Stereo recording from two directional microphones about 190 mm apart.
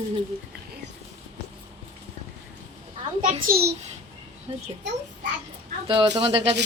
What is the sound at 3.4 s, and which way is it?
Speech, 55° right (ahead or behind).